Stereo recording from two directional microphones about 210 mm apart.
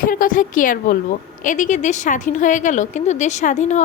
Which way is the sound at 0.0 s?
40° left (ahead or behind).